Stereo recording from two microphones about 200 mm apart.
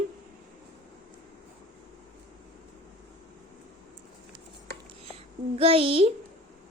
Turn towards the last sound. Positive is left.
turn(degrees=-30)  # may be behind; listen again after turning